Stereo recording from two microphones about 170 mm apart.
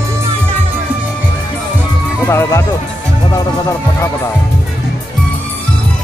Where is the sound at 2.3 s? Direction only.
15° left (ahead or behind).